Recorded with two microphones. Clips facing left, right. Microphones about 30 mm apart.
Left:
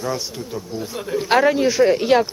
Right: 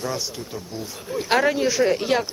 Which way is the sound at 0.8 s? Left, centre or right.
Left.